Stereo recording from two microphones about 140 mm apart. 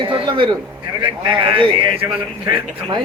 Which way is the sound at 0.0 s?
35° right (ahead or behind).